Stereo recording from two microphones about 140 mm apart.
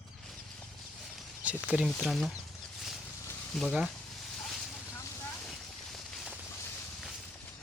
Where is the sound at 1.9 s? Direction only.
Centre (ahead or behind).